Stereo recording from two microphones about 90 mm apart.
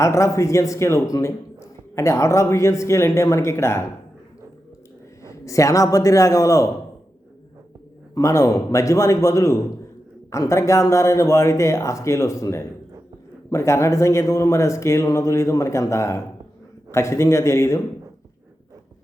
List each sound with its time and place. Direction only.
0.0 s a man's voice: 35° left (ahead or behind)
5.2 s a man's voice: 35° left (ahead or behind)
8.1 s a man's voice: 35° left (ahead or behind)